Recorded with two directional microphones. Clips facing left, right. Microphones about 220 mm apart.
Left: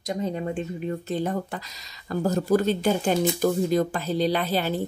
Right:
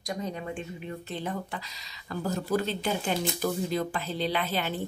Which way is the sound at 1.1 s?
45° left (ahead or behind).